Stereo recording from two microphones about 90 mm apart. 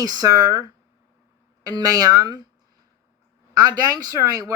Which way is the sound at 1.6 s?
45° right (ahead or behind).